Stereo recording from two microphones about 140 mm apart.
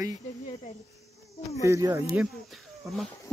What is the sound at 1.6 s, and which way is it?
Speech, 25° right (ahead or behind).